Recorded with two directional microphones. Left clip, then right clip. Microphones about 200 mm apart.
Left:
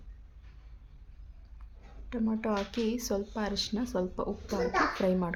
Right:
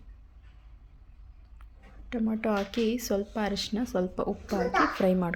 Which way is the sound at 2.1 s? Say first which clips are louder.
Right 3 dB; 15° right (ahead or behind).